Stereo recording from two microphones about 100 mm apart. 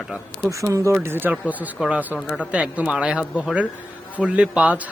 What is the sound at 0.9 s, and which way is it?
Speech, 25° right (ahead or behind).